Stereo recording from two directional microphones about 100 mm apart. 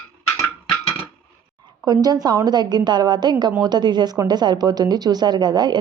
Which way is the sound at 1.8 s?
40° right (ahead or behind).